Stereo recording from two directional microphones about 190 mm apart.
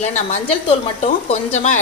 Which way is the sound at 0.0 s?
35° left (ahead or behind).